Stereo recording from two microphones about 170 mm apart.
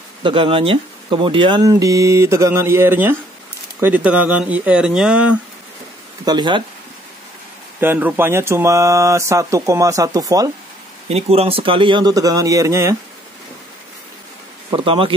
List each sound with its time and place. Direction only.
0.2 s speech: 30° right (ahead or behind); by 5.4 s 5° right (ahead or behind)
6.2 s speech: 25° right (ahead or behind)
7.8 s speech: 10° right (ahead or behind)
11.1 s speech: 35° right (ahead or behind); by 12.9 s 15° right (ahead or behind)
14.7 s speech: 30° right (ahead or behind)